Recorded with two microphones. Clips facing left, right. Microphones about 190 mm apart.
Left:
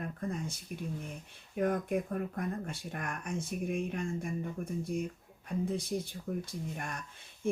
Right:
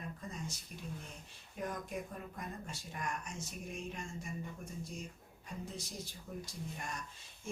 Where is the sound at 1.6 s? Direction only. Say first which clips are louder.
Left 10 dB; 60° left (ahead or behind).